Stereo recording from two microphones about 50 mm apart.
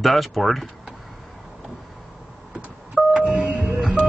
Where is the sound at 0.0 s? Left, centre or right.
Centre.